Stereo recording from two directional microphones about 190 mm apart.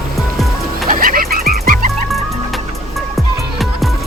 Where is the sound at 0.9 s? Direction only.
50° right (ahead or behind).